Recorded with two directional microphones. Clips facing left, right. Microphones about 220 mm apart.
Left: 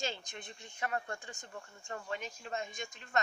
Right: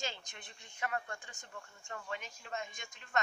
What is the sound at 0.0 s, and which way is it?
Speech, 35° left (ahead or behind).